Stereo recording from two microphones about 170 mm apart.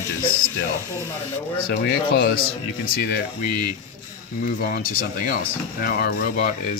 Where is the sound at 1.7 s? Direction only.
65° left (ahead or behind).